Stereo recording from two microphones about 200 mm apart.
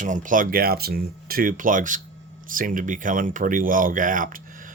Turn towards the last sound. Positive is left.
turn(degrees=-40)  # may be behind; listen again after turning